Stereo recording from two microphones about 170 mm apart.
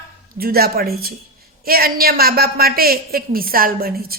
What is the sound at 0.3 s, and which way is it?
Speech, 65° right (ahead or behind).